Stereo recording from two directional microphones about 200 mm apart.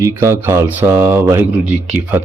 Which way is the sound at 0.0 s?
15° right (ahead or behind).